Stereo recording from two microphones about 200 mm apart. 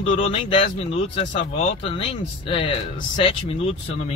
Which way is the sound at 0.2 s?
30° left (ahead or behind).